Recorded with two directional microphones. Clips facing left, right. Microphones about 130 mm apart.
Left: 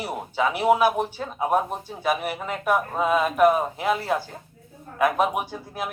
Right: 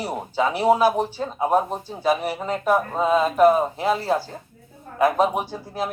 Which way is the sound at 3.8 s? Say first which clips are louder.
Right 2 dB; 30° right (ahead or behind).